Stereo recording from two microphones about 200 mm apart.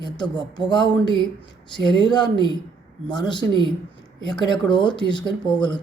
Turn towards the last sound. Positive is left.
turn(degrees=20)  # may be behind; listen again after turning